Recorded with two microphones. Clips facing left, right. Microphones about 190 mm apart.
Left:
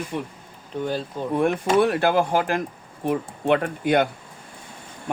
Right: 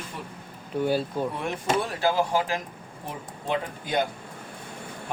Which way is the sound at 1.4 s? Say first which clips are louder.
Left 12 dB; 65° left (ahead or behind).